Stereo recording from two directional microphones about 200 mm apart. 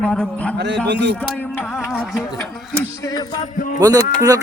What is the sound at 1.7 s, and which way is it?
Music, 5° right (ahead or behind).